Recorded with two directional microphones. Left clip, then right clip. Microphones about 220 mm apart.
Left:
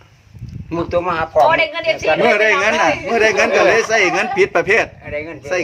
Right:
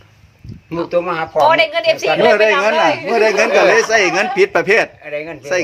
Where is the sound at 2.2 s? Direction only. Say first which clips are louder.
Right 3 dB; 10° right (ahead or behind).